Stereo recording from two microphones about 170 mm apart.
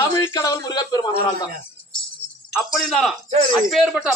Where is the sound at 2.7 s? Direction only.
Centre (ahead or behind).